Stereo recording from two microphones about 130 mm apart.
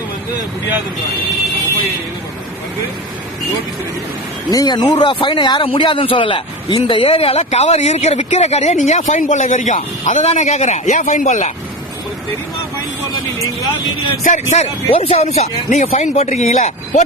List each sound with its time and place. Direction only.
4.5 s speech: 30° left (ahead or behind); by 11.5 s 70° left (ahead or behind)
14.3 s speech: 65° left (ahead or behind)
15.4 s speech: 70° left (ahead or behind)
15.9 s speech: 55° left (ahead or behind)